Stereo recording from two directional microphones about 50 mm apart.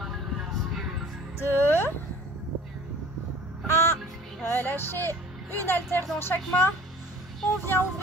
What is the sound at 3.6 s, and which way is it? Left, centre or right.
Music, left.